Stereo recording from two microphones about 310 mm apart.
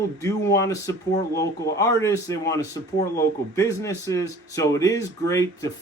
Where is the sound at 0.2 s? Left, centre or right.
Centre.